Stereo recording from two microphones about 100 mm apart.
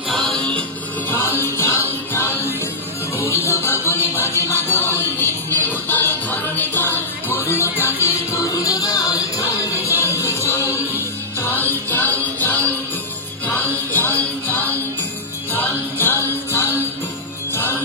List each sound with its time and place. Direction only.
0.1 s music: centre (ahead or behind)
1.4 s music: 25° left (ahead or behind)